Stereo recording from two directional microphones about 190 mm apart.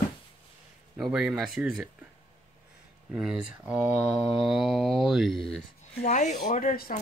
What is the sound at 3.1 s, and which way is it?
Speech, 5° right (ahead or behind).